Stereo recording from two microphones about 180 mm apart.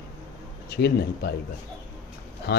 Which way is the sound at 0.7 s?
65° left (ahead or behind).